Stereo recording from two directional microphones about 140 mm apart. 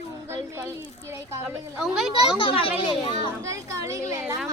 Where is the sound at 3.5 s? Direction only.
20° right (ahead or behind).